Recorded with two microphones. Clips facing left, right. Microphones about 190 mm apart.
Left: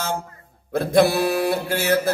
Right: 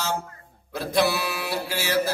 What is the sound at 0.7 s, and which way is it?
Speech, 50° left (ahead or behind).